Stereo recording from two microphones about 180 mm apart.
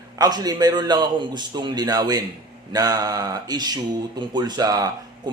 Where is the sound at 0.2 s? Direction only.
20° right (ahead or behind).